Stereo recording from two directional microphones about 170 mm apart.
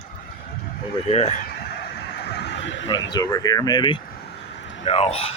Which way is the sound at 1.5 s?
75° left (ahead or behind).